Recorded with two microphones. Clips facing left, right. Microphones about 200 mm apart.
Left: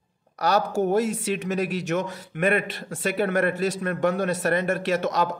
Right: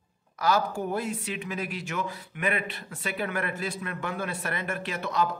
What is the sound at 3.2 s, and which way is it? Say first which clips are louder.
Speech: left 8 dB; 40° left (ahead or behind).